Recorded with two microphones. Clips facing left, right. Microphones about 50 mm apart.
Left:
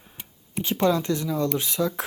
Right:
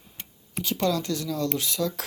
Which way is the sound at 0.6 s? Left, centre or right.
Left.